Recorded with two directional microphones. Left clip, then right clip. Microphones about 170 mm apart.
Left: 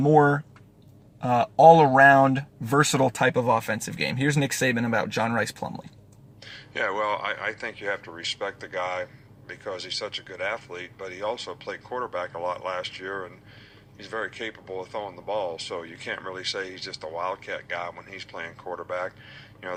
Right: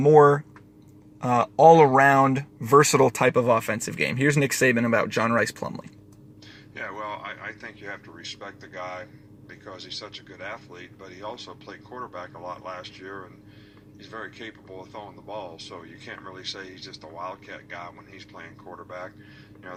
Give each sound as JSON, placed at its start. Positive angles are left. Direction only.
{"t": 0.0, "sound": "speech", "side_deg": -5}
{"t": 6.7, "sound": "speech", "side_deg": 40}
{"t": 10.2, "sound": "speech", "side_deg": 30}